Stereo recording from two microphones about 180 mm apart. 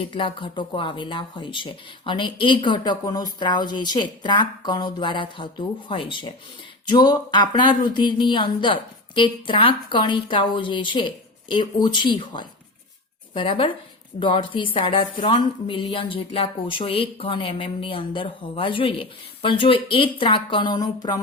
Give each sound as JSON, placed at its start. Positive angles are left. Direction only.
{"t": 0.0, "sound": "speech", "side_deg": 30}